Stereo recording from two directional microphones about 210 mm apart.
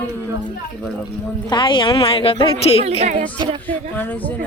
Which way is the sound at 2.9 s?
30° right (ahead or behind).